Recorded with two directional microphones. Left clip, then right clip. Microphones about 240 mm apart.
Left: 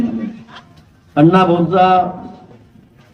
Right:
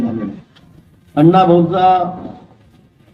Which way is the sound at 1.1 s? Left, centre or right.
Left.